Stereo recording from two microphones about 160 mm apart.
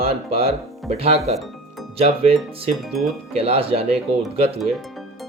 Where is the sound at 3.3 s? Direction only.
35° right (ahead or behind).